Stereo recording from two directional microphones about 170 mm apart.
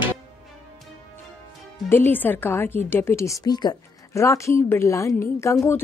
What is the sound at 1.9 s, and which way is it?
A woman's voice, 10° left (ahead or behind).